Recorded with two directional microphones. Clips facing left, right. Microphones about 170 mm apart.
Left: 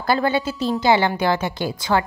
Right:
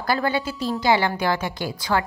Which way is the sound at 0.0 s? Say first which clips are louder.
Left 3 dB; 25° left (ahead or behind).